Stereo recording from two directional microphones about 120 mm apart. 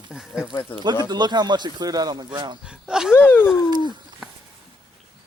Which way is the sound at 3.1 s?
15° left (ahead or behind).